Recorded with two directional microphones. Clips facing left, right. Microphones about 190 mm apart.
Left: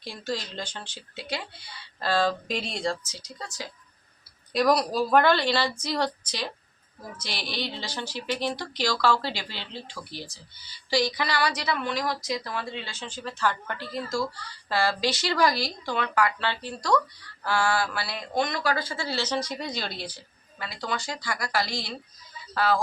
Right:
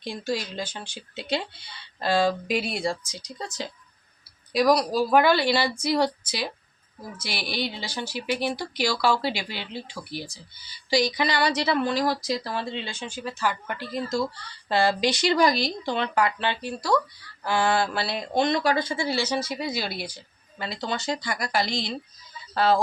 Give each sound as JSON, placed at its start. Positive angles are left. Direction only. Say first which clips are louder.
{"t": 0.0, "sound": "a woman's voice", "louder": "right 3 dB", "side_deg": -15}
{"t": 2.0, "sound": "a woman's voice", "louder": "right 3 dB", "side_deg": -15}
{"t": 4.5, "sound": "a woman's voice", "louder": "right 2 dB", "side_deg": 0}
{"t": 20.6, "sound": "speech", "louder": "right 2 dB", "side_deg": -25}